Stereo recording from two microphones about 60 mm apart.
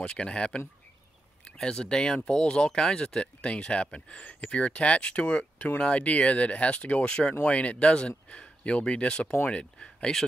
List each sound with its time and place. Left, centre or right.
0.0 s speech: centre